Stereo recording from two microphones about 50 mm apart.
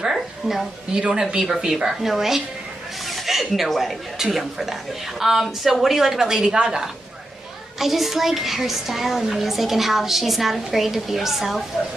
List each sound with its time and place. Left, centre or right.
0.0 s a sound: centre
0.9 s a woman's voice: centre
7.8 s a woman's voice: centre